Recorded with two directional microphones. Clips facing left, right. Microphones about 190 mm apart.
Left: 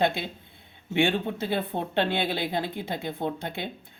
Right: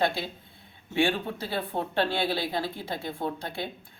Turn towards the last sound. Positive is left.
turn(degrees=20)  # may be behind; listen again after turning